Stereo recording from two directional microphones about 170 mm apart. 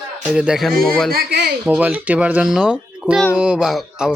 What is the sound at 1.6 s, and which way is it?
A child's voice, 10° right (ahead or behind).